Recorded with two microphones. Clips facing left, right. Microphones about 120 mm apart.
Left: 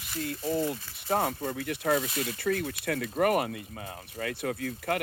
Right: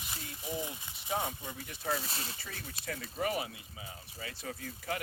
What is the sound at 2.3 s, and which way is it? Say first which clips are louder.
Speech: left 17 dB; 60° left (ahead or behind).